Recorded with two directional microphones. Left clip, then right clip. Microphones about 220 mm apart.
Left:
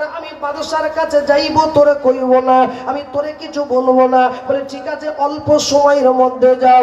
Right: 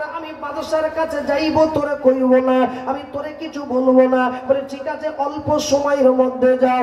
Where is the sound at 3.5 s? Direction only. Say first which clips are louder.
Left 3 dB; 15° right (ahead or behind).